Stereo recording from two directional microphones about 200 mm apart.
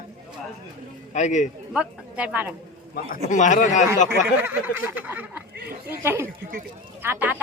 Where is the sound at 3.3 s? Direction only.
40° left (ahead or behind).